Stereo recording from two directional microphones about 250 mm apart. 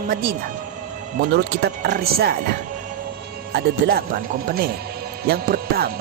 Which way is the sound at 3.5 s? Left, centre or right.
Right.